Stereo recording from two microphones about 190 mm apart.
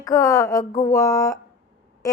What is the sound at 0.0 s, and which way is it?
A woman's voice, 15° left (ahead or behind).